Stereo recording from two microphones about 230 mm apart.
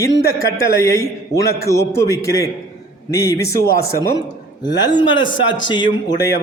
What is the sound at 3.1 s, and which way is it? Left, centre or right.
Speech, left.